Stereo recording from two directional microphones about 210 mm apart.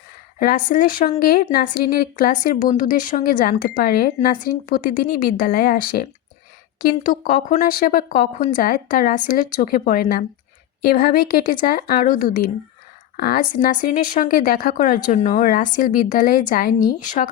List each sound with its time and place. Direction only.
0.3 s a woman's voice: 40° left (ahead or behind)